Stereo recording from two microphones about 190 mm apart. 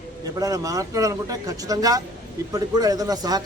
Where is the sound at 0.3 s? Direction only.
20° right (ahead or behind).